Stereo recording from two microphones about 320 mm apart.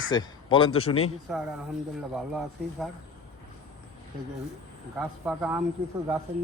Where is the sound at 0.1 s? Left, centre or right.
Centre.